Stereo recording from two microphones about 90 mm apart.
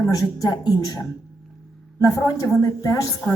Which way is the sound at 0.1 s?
45° left (ahead or behind).